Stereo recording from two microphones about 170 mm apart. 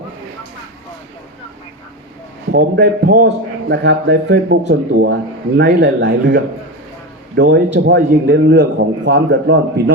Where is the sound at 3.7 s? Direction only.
90° right.